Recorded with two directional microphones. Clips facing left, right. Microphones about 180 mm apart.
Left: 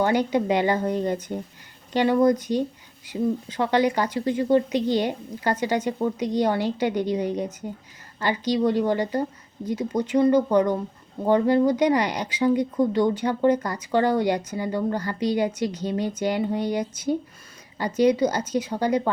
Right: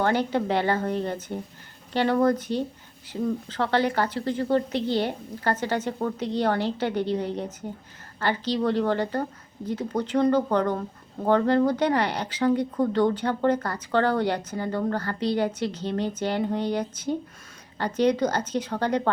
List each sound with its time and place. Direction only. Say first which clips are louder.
0.0 s speech: left 2 dB; 15° left (ahead or behind)